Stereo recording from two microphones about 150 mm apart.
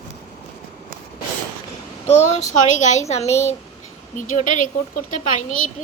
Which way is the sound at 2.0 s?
50° left (ahead or behind).